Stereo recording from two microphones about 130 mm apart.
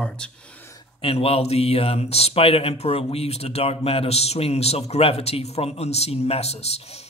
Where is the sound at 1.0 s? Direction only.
50° left (ahead or behind).